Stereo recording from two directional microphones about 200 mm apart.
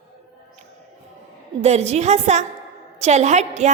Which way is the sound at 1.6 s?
35° right (ahead or behind).